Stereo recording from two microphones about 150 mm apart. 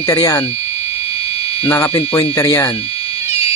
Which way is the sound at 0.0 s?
25° left (ahead or behind).